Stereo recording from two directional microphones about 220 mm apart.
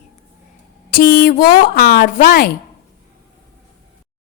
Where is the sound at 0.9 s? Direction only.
40° left (ahead or behind).